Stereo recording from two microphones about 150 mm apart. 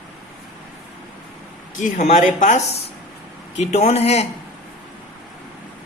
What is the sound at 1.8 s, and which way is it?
Speech, 55° left (ahead or behind).